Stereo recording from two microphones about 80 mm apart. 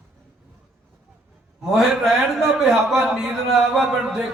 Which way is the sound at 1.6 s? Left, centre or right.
Centre.